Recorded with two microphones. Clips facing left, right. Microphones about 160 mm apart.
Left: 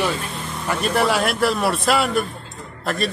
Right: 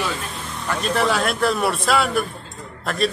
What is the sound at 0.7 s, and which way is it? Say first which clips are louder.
Speech: left 1 dB; 10° left (ahead or behind).